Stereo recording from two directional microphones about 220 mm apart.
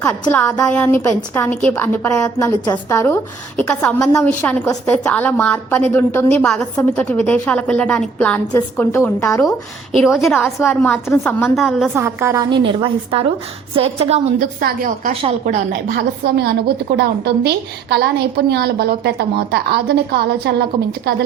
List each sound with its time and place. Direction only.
0.0 s a woman's voice: 10° left (ahead or behind)
12.0 s a woman's voice: 15° right (ahead or behind); by 15.6 s 35° right (ahead or behind)
16.0 s a woman's voice: 45° right (ahead or behind)